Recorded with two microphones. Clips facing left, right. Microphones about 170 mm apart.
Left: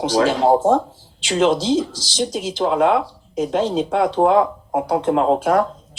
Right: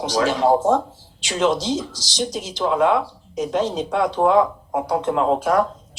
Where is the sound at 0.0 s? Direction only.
30° left (ahead or behind).